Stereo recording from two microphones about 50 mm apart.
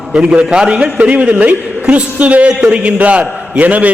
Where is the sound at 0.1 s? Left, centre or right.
Centre.